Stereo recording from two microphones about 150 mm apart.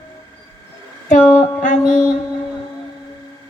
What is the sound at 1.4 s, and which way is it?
Speech, 55° left (ahead or behind).